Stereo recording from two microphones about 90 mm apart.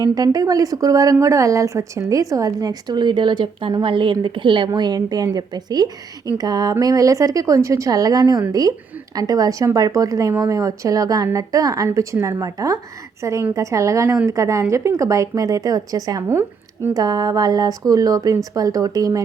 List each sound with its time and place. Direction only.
0.0 s a woman's voice: 45° right (ahead or behind); by 4.7 s 65° right (ahead or behind)
4.7 s a woman's voice: 45° right (ahead or behind)
16.3 s speech: 20° right (ahead or behind)
16.9 s a woman's voice: 45° right (ahead or behind)